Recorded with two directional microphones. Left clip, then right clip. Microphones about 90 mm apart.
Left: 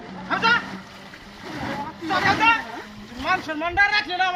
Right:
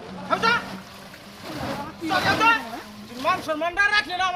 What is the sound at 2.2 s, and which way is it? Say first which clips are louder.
Speech: left 2 dB; 5° right (ahead or behind).